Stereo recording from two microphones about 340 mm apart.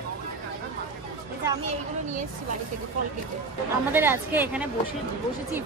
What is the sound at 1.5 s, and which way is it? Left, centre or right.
Speech, centre.